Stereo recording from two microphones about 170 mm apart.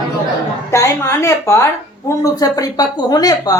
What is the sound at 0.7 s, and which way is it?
A woman's voice, 15° left (ahead or behind).